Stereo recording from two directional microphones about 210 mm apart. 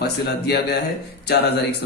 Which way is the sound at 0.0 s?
50° left (ahead or behind).